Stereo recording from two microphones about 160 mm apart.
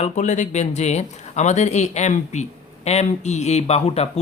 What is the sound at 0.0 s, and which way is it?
Speech, 50° left (ahead or behind).